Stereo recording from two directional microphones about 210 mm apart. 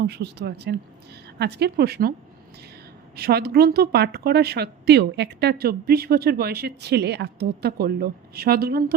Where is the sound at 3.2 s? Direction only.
50° right (ahead or behind).